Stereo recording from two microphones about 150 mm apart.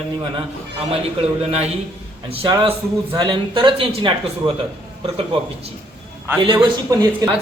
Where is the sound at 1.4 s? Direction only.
45° right (ahead or behind).